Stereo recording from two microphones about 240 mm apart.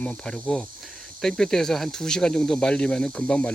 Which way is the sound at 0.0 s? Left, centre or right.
Centre.